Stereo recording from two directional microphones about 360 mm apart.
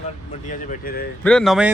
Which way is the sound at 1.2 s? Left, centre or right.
Centre.